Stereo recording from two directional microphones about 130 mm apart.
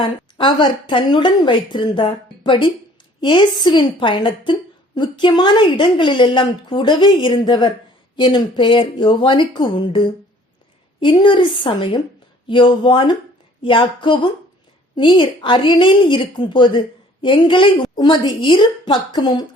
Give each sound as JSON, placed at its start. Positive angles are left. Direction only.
{"t": 0.0, "sound": "a woman's voice", "side_deg": 40}
{"t": 11.0, "sound": "a woman's voice", "side_deg": 40}